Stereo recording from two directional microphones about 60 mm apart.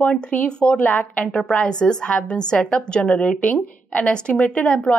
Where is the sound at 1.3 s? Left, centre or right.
Centre.